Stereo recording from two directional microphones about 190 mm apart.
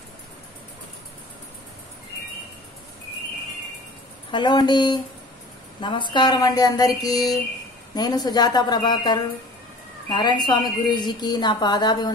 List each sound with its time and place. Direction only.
4.3 s a woman's voice: 25° left (ahead or behind)